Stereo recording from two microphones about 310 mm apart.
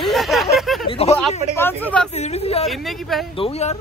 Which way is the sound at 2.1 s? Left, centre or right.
Left.